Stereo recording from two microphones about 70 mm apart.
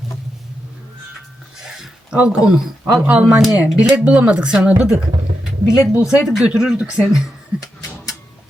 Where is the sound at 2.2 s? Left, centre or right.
Centre.